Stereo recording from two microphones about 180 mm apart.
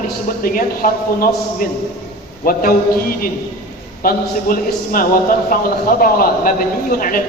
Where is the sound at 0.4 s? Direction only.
50° left (ahead or behind).